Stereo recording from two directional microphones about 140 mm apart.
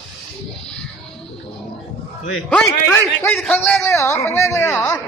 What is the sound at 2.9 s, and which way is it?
A man's voice, 10° left (ahead or behind).